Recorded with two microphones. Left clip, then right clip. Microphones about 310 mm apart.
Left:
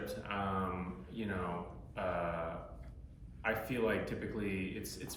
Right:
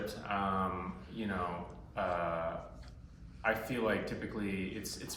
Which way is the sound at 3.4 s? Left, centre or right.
Centre.